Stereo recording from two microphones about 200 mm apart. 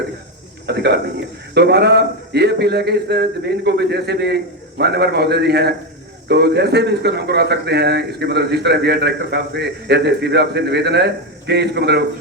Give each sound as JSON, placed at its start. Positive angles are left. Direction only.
{"t": 0.7, "sound": "speech", "side_deg": -55}